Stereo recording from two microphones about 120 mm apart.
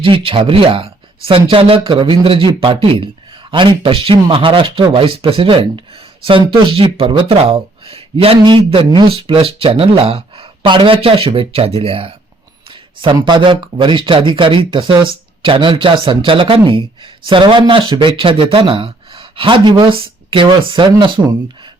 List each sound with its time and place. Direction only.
0.0 s speech: 45° right (ahead or behind)
13.0 s speech: 40° right (ahead or behind)